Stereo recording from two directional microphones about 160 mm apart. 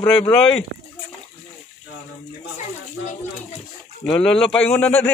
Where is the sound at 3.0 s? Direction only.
50° left (ahead or behind).